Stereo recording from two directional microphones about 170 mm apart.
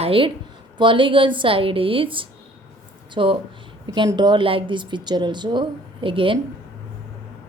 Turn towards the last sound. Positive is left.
turn(degrees=-30)  # may be behind; listen again after turning